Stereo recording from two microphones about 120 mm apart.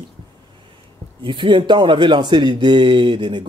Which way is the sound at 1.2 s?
45° right (ahead or behind).